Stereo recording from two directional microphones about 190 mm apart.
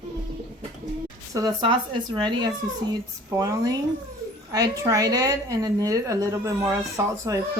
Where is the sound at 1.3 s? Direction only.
20° right (ahead or behind).